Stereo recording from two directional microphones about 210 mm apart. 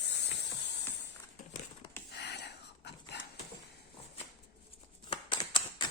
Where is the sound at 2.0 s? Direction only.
55° left (ahead or behind).